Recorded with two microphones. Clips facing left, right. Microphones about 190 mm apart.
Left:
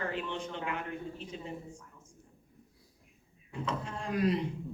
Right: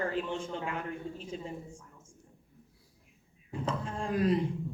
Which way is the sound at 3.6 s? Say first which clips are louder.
Right 2 dB; 30° right (ahead or behind).